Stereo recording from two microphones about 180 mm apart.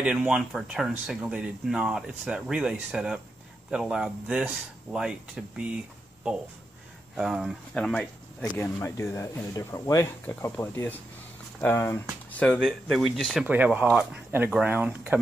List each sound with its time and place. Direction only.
0.0 s speech: 5° right (ahead or behind)
7.2 s speech: 5° right (ahead or behind)
8.7 s speech: 15° left (ahead or behind); by 15.1 s 10° right (ahead or behind)